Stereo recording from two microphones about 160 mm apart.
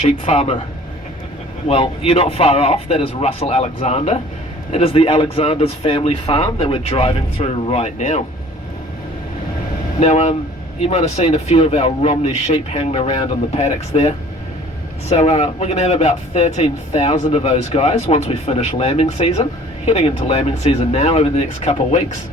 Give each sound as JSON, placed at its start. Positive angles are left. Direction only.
{"t": 0.0, "sound": "speech", "side_deg": 45}
{"t": 1.6, "sound": "speech", "side_deg": 35}
{"t": 10.0, "sound": "speech", "side_deg": 45}
{"t": 15.1, "sound": "speech", "side_deg": 40}